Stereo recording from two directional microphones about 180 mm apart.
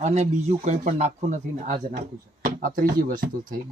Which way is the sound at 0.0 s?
40° right (ahead or behind).